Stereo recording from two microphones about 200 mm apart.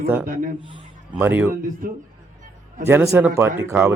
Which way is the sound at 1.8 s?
45° right (ahead or behind).